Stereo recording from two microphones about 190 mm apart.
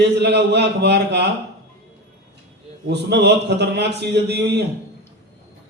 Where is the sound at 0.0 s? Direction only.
65° right (ahead or behind).